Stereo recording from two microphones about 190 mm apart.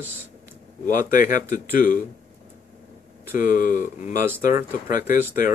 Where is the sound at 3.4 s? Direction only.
45° left (ahead or behind).